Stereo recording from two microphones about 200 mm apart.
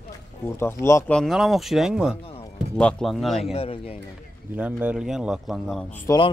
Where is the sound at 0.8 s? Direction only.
15° left (ahead or behind).